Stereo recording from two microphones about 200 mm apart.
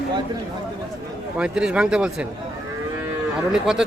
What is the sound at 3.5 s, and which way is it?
Speech, centre (ahead or behind).